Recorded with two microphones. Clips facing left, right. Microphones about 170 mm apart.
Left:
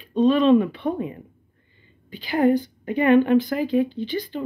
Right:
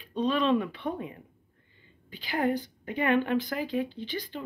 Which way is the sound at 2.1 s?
20° left (ahead or behind).